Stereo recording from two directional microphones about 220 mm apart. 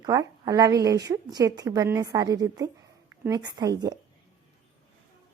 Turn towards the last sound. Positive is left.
turn(degrees=-20)  # may be behind; listen again after turning